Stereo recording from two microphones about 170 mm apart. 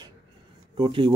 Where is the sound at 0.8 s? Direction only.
30° right (ahead or behind).